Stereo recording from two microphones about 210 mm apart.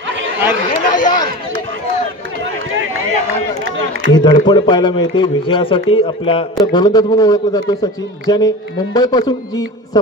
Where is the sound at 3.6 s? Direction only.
65° right (ahead or behind).